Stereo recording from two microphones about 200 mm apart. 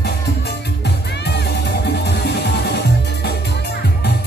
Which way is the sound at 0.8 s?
55° left (ahead or behind).